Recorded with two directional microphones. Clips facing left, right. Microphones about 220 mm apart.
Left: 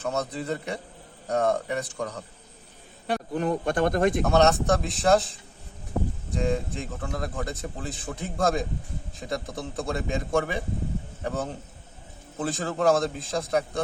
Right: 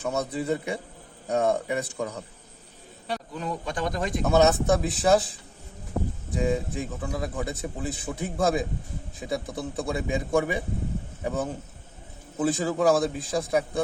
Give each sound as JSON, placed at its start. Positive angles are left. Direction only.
{"t": 0.0, "sound": "speech", "side_deg": -10}
{"t": 3.1, "sound": "speech", "side_deg": 55}
{"t": 4.3, "sound": "a man's voice", "side_deg": -5}
{"t": 6.3, "sound": "a man's voice", "side_deg": -5}